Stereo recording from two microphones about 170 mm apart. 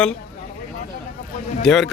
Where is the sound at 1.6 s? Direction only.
5° left (ahead or behind).